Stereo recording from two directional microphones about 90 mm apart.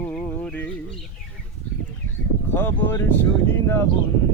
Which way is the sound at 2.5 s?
25° left (ahead or behind).